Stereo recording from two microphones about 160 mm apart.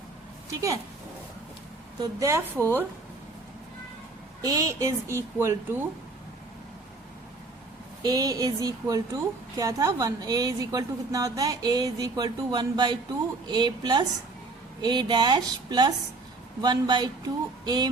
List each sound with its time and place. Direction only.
2.0 s a woman's voice: 20° right (ahead or behind)
4.4 s speech: 20° right (ahead or behind)
8.0 s a woman's voice: 25° right (ahead or behind)